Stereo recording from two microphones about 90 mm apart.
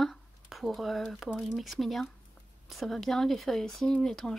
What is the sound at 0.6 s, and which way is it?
Speech, centre (ahead or behind).